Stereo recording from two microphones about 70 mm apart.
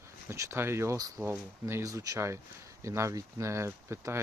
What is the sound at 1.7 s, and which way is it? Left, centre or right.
Speech, right.